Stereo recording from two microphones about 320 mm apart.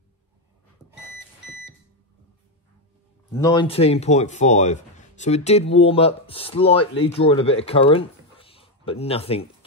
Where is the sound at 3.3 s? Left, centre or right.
Centre.